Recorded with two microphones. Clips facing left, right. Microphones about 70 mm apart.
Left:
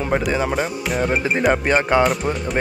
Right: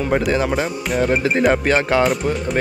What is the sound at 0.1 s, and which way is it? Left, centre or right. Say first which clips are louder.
Speech: right 2 dB; centre.